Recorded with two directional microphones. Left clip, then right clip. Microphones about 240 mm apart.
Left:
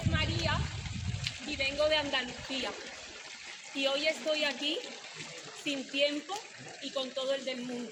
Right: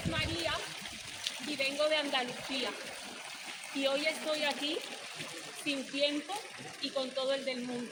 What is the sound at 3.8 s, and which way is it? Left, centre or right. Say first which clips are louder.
Speech: left 2 dB; centre.